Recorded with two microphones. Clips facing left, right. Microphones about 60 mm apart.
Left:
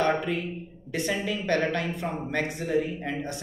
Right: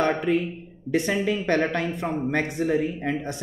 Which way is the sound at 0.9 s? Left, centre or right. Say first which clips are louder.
Right 5 dB; right.